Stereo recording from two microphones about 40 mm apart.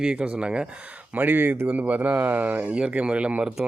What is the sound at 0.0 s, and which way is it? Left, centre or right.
Speech, right.